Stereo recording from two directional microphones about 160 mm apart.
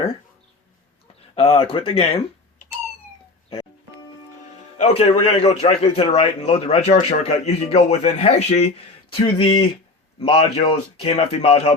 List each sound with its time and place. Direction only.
1.4 s a man's voice: 35° left (ahead or behind)
4.8 s a man's voice: 40° left (ahead or behind)